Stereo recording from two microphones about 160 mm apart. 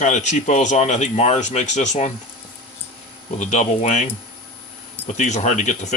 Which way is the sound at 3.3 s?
45° left (ahead or behind).